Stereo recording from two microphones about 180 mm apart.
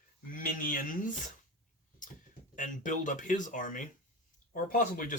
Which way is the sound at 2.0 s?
45° left (ahead or behind).